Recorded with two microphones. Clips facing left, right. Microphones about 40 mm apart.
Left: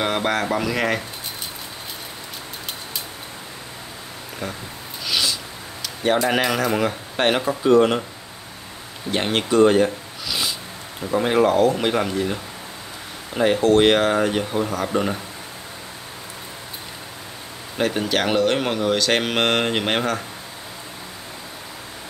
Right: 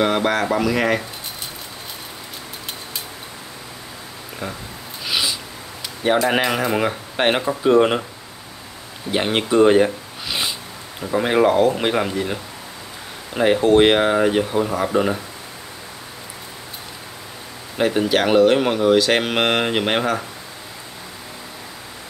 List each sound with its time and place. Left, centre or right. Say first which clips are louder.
0.0 s speech: right 3 dB; centre
5.0 s a sound: even; centre
6.0 s speech: right 2 dB; centre
6.3 s speech: right 1 dB; centre
9.1 s speech: right 1 dB; centre
10.2 s a sound: right 1 dB; right
11.0 s speech: right 1 dB; centre
17.7 s speech: right 3 dB; centre